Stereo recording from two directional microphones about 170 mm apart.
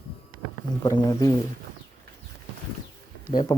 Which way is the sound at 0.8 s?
20° left (ahead or behind).